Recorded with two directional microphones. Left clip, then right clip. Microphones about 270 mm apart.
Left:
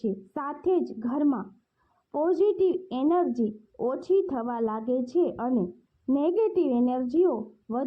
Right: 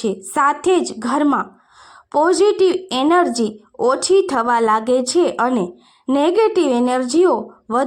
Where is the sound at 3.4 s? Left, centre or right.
Right.